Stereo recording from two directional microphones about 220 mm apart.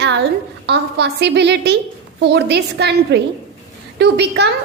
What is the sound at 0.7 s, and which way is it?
A woman's voice, 50° right (ahead or behind).